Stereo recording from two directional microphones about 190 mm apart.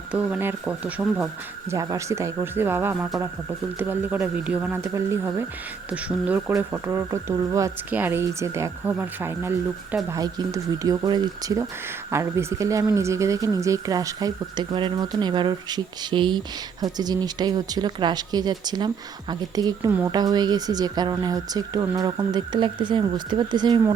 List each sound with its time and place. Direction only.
0.1 s speech: 10° right (ahead or behind); by 23.9 s 25° right (ahead or behind)